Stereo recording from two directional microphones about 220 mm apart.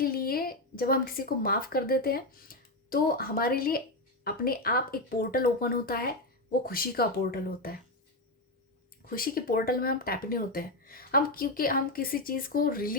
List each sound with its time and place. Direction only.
0.0 s a woman's voice: 45° left (ahead or behind)
9.0 s speech: 40° left (ahead or behind)